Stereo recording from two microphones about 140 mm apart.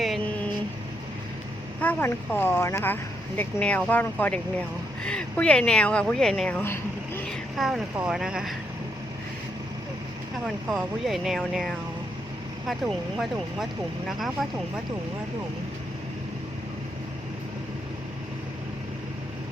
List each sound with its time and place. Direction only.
0.0 s vehicle: centre (ahead or behind)
1.8 s speech: 15° left (ahead or behind)
6.6 s a sound: 15° left (ahead or behind)
7.3 s speech: centre (ahead or behind)
10.4 s speech: centre (ahead or behind)